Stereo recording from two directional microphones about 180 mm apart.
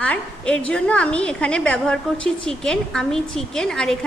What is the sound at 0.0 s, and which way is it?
A woman's voice, 5° left (ahead or behind).